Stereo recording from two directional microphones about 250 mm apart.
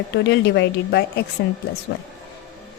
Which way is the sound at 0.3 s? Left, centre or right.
Left.